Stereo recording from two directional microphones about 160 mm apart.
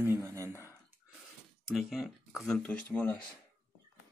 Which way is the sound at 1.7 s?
Centre (ahead or behind).